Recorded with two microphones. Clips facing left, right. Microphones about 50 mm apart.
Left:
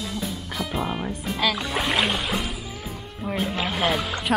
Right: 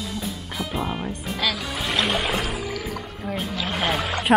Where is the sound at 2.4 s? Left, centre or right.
Right.